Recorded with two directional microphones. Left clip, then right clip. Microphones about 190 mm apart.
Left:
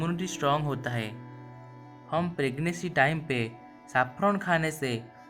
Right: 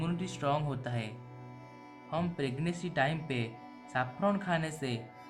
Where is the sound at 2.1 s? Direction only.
30° left (ahead or behind).